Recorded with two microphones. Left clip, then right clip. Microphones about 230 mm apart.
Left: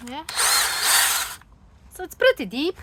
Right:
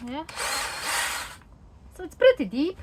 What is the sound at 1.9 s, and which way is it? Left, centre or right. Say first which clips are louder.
Speech: even; left.